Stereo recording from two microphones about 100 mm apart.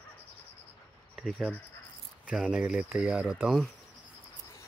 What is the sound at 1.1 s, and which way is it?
Speech, 5° left (ahead or behind).